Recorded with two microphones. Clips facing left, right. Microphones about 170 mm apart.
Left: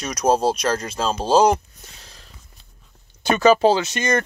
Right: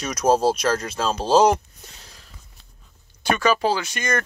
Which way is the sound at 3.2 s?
25° left (ahead or behind).